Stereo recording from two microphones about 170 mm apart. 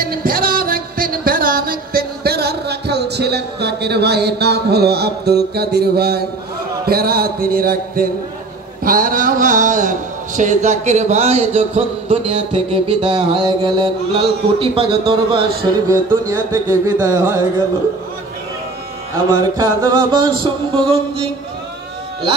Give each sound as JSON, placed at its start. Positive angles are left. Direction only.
{"t": 0.0, "sound": "music", "side_deg": -60}
{"t": 6.9, "sound": "a man's voice", "side_deg": -65}
{"t": 15.9, "sound": "music", "side_deg": -20}
{"t": 19.5, "sound": "a sound", "side_deg": -20}